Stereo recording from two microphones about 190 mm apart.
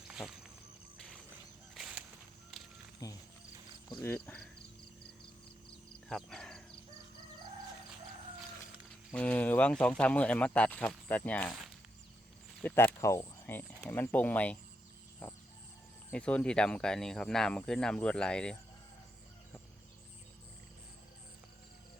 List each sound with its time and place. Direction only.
0.1 s walk: 5° right (ahead or behind)
0.9 s a sound: 5° left (ahead or behind)
3.0 s music: 20° left (ahead or behind)
3.8 s speech: 20° left (ahead or behind)
6.1 s a sound: 5° left (ahead or behind)
9.1 s speech: 5° left (ahead or behind)